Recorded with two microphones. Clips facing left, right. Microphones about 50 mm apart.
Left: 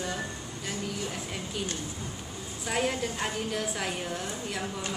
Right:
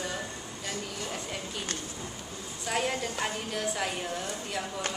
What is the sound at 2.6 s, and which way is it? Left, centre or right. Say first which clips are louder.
A woman's voice: left 1 dB; centre.